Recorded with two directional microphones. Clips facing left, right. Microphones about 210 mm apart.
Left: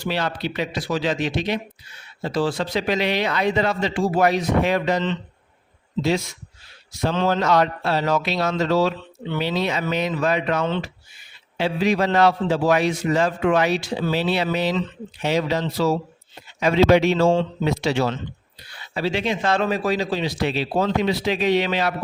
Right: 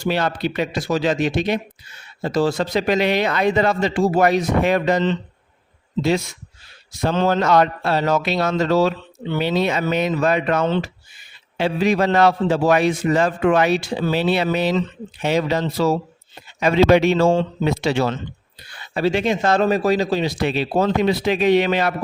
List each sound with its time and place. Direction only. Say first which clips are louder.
0.0 s a man's voice: right 4 dB; 50° right (ahead or behind)